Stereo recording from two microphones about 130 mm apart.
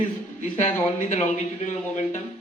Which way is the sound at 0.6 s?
60° left (ahead or behind).